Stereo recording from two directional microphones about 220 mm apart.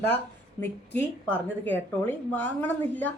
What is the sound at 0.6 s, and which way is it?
Speech, 15° right (ahead or behind).